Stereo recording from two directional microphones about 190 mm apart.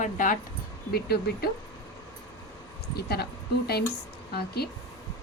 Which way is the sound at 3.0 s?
55° left (ahead or behind).